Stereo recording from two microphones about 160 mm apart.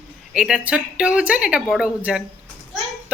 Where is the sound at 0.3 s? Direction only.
5° right (ahead or behind).